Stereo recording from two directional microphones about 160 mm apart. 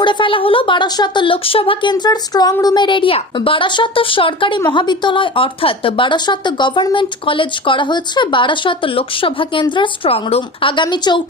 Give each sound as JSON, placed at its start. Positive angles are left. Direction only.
{"t": 0.0, "sound": "speech", "side_deg": 30}